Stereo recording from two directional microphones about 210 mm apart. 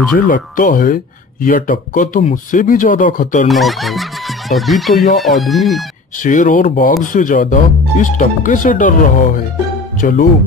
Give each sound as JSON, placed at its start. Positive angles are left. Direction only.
{"t": 0.1, "sound": "speech", "side_deg": 40}
{"t": 3.4, "sound": "speech", "side_deg": 0}
{"t": 6.2, "sound": "speech", "side_deg": 40}